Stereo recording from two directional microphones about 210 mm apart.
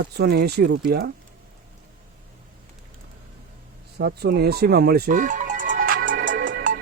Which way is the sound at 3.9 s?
50° right (ahead or behind).